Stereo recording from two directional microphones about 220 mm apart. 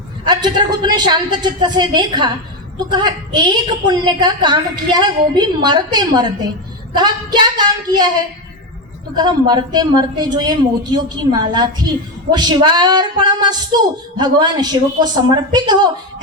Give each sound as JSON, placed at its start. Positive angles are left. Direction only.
{"t": 0.3, "sound": "a woman's voice", "side_deg": -20}
{"t": 9.1, "sound": "a woman's voice", "side_deg": -20}